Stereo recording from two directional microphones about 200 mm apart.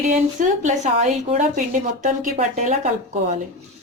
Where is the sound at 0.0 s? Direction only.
40° right (ahead or behind).